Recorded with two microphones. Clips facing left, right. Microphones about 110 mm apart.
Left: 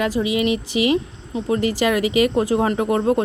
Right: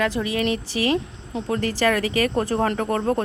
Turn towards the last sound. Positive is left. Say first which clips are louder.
# left 4 dB
turn(degrees=15)  # may be behind; listen again after turning